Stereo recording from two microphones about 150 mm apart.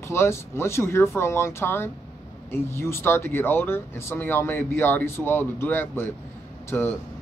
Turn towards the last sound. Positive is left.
turn(degrees=15)  # may be behind; listen again after turning